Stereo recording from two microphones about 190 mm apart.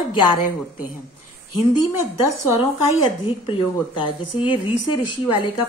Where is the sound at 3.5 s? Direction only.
25° left (ahead or behind).